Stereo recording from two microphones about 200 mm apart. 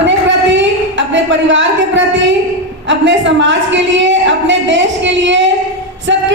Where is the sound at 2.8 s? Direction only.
65° right (ahead or behind).